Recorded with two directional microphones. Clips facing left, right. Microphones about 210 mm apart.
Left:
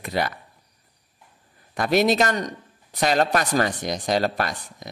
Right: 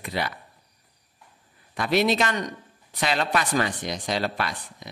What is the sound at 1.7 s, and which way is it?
Speech, 45° left (ahead or behind).